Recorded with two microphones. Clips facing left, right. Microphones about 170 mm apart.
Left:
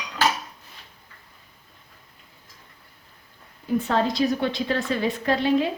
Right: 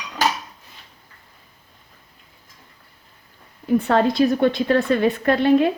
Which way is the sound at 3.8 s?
60° right (ahead or behind).